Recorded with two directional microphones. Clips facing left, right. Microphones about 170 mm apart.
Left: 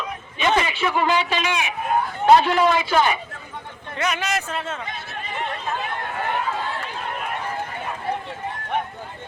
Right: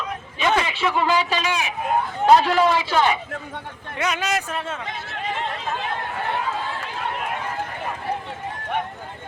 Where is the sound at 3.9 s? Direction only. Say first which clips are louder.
Right 1 dB; 15° right (ahead or behind).